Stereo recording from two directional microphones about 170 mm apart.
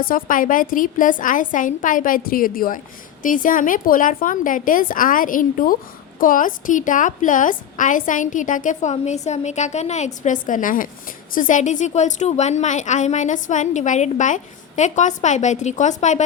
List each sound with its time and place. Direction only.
0.0 s a woman's voice: 55° left (ahead or behind)